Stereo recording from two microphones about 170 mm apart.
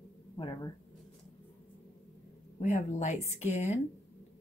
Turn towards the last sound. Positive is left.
turn(degrees=40)  # may be behind; listen again after turning